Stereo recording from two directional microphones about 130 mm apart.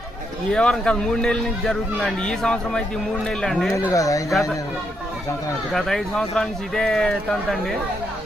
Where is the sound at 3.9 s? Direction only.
25° left (ahead or behind).